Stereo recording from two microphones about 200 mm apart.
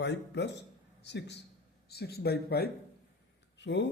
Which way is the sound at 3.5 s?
60° left (ahead or behind).